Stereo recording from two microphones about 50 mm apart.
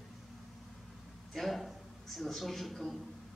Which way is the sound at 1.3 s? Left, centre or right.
Centre.